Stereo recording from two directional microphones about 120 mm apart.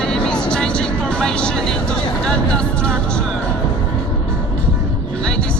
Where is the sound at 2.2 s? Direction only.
10° left (ahead or behind).